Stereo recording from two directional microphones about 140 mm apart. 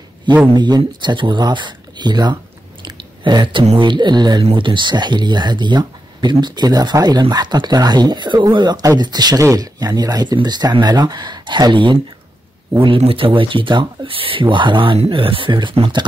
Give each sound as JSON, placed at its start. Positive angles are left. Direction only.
{"t": 0.6, "sound": "speech", "side_deg": -30}
{"t": 2.8, "sound": "a sound", "side_deg": -35}
{"t": 3.6, "sound": "speech", "side_deg": -35}